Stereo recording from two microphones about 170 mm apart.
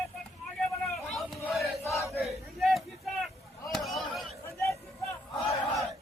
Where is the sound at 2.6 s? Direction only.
Centre (ahead or behind).